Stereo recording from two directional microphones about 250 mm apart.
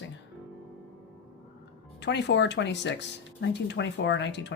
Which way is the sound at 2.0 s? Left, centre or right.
Left.